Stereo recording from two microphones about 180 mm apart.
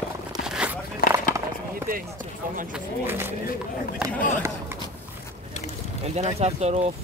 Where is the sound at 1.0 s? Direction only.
55° left (ahead or behind).